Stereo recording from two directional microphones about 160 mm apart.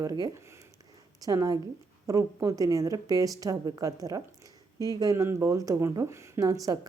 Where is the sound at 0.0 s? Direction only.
20° right (ahead or behind).